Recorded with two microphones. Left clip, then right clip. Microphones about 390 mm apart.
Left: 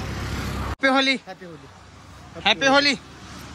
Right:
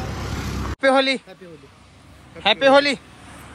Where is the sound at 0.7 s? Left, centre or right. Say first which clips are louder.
Right 2 dB; centre.